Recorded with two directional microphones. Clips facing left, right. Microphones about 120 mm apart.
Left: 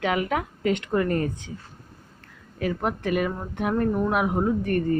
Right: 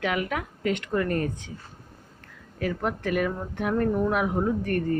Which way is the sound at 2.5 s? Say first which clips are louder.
Left 2 dB; 20° left (ahead or behind).